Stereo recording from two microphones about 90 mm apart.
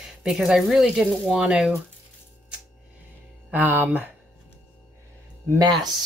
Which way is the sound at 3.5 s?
20° right (ahead or behind).